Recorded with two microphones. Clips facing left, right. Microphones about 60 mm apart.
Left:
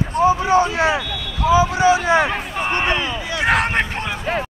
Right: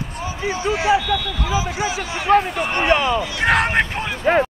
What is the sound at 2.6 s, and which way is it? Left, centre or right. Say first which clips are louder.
Speech: even; left.